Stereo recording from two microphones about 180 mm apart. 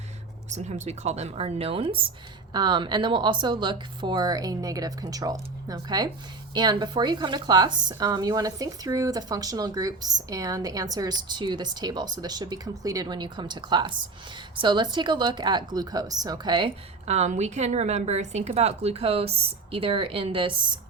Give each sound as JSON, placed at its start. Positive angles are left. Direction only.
{"t": 0.5, "sound": "a woman's voice", "side_deg": -40}